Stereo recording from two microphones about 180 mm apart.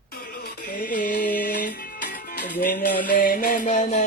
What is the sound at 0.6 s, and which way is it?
Music, 45° left (ahead or behind).